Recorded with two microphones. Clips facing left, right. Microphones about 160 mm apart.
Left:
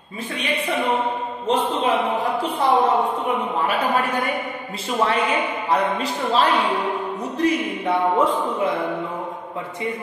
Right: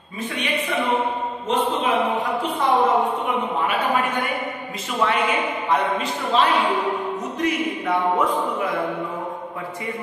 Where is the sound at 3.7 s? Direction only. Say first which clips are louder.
Left 2 dB; 35° left (ahead or behind).